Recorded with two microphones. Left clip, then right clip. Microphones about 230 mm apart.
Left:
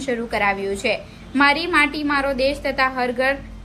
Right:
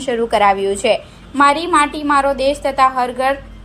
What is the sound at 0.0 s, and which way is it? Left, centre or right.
Speech, right.